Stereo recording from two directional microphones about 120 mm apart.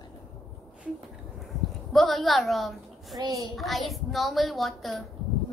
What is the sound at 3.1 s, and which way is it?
Speech, 30° right (ahead or behind).